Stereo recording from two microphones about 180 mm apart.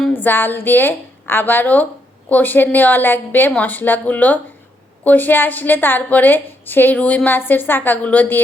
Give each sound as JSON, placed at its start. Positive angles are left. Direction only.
{"t": 0.0, "sound": "a woman's voice", "side_deg": 10}